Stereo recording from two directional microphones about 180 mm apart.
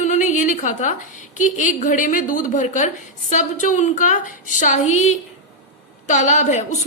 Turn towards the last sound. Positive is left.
turn(degrees=40)  # may be behind; listen again after turning